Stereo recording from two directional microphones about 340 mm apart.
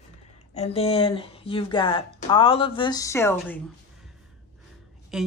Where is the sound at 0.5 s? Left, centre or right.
Centre.